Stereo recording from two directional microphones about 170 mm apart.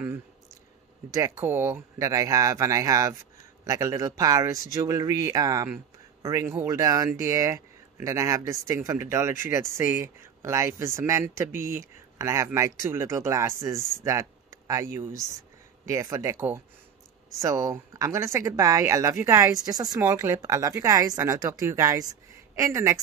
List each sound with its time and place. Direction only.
1.1 s speech: 15° right (ahead or behind)